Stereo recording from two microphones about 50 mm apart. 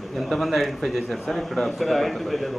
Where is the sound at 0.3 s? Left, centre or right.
Centre.